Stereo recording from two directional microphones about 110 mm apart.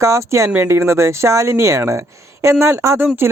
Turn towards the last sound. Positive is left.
turn(degrees=-20)  # may be behind; listen again after turning